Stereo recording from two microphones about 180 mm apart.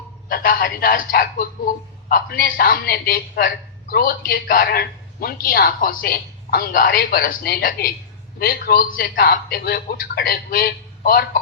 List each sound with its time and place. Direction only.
0.3 s a man's voice: 55° left (ahead or behind)